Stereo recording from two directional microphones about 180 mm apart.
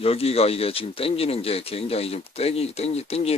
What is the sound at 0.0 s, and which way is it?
Speech, 35° left (ahead or behind).